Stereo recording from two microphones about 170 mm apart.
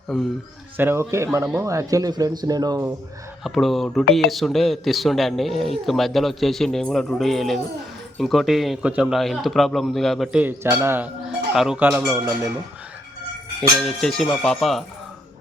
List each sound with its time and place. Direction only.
0.8 s speech: 15° right (ahead or behind)
3.4 s speech: centre (ahead or behind)
10.4 s speech: 15° right (ahead or behind)
13.6 s speech: 5° left (ahead or behind)